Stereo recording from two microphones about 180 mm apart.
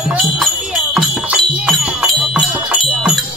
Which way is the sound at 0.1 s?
Centre (ahead or behind).